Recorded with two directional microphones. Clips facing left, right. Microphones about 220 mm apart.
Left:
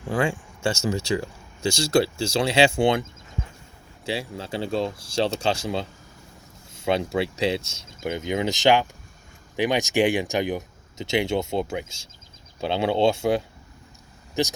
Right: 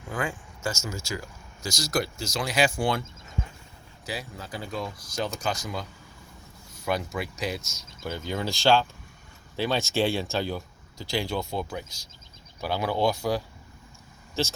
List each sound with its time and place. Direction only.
0.1 s speech: 30° left (ahead or behind)
4.0 s speech: 25° left (ahead or behind)